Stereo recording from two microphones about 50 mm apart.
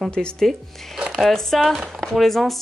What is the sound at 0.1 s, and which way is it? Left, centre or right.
Speech, centre.